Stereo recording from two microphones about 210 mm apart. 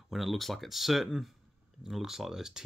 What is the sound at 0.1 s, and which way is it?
Speech, centre (ahead or behind).